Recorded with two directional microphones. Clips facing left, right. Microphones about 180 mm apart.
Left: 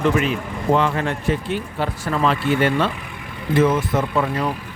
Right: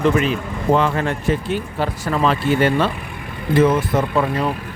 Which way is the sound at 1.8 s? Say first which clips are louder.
Right 1 dB; 40° right (ahead or behind).